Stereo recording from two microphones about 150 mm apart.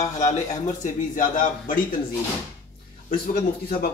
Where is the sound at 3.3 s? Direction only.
75° left (ahead or behind).